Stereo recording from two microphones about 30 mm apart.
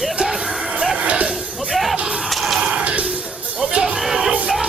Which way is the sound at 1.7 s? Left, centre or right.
Centre.